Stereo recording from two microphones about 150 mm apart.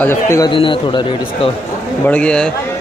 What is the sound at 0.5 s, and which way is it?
Speech, 35° left (ahead or behind).